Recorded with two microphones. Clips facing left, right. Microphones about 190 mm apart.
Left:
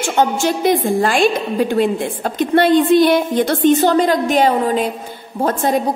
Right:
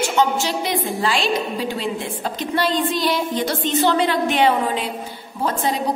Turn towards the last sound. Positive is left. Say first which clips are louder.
# left 6 dB
turn(degrees=50)  # may be behind; listen again after turning